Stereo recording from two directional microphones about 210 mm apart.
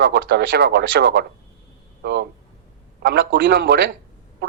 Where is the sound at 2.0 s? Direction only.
50° right (ahead or behind).